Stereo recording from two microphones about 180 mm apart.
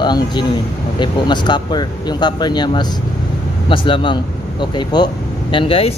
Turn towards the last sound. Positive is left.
turn(degrees=30)  # may be behind; listen again after turning